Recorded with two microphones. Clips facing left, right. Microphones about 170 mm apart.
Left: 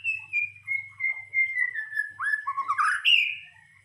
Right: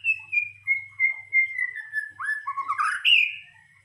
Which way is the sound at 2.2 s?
5° right (ahead or behind).